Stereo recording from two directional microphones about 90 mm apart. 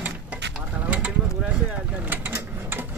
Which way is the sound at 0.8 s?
15° right (ahead or behind).